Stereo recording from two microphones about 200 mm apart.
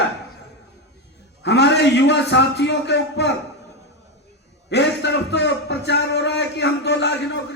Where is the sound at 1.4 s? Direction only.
60° left (ahead or behind).